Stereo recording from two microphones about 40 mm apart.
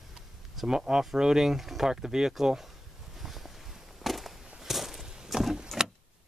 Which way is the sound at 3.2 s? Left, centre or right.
Centre.